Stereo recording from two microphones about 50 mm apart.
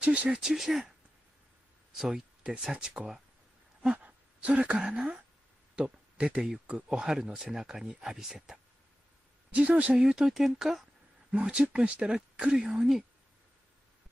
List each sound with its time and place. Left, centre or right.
0.0 s speech: right
0.4 s a woman's voice: centre
2.0 s a woman's voice: centre
4.0 s a sound: right
5.8 s a woman's voice: centre
9.5 s speech: right
9.9 s speech: centre
11.4 s a woman's voice: centre